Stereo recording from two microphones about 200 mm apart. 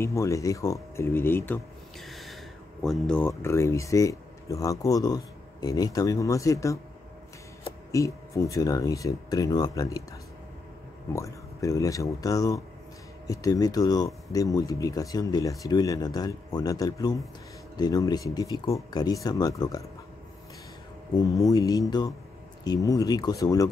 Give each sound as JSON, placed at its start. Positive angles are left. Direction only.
{"t": 0.0, "sound": "speech", "side_deg": 15}
{"t": 7.9, "sound": "speech", "side_deg": 15}
{"t": 11.1, "sound": "speech", "side_deg": 15}
{"t": 21.1, "sound": "speech", "side_deg": 15}